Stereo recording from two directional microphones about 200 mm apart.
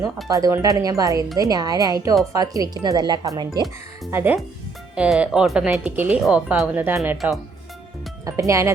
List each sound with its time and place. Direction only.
0.3 s speech: 15° right (ahead or behind)
8.2 s speech: 15° right (ahead or behind)